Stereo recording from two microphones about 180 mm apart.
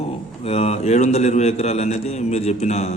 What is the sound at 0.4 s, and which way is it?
A man's voice, 35° left (ahead or behind).